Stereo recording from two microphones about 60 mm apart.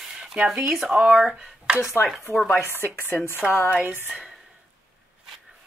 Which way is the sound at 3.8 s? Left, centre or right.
Right.